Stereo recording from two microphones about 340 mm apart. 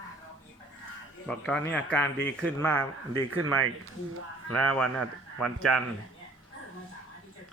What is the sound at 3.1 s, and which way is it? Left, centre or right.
Speech, right.